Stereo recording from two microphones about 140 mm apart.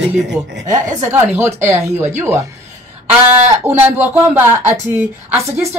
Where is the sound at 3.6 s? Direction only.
15° right (ahead or behind).